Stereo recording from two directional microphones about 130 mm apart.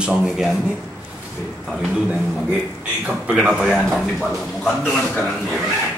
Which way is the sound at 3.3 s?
10° right (ahead or behind).